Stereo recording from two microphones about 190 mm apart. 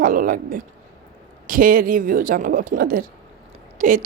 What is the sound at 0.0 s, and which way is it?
Speech, 45° right (ahead or behind).